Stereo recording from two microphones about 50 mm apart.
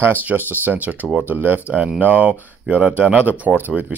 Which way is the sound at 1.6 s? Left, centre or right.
Right.